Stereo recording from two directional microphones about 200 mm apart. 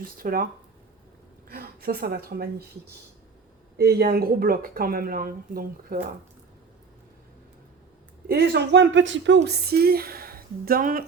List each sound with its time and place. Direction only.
0.2 s speech: 45° right (ahead or behind)
1.5 s speech: 50° right (ahead or behind)
3.8 s speech: 50° right (ahead or behind)
8.3 s speech: 55° right (ahead or behind)